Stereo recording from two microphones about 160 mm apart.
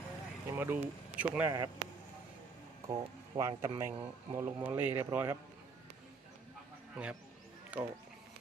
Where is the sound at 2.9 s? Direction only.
20° right (ahead or behind).